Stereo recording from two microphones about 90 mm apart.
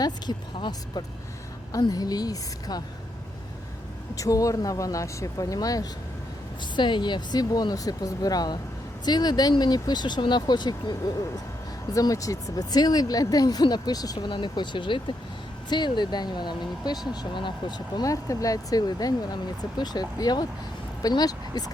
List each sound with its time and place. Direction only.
0.0 s speech: 50° left (ahead or behind)
4.1 s speech: 40° left (ahead or behind)
6.7 s speech: 60° left (ahead or behind)
11.9 s speech: 40° left (ahead or behind)
14.3 s speech: 60° left (ahead or behind)
18.1 s speech: 40° left (ahead or behind)